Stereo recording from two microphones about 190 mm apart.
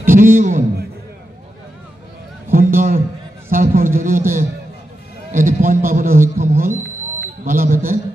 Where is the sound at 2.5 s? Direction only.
45° right (ahead or behind).